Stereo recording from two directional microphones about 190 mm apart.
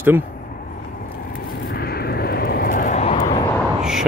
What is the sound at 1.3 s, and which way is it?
Vehicle, 55° left (ahead or behind).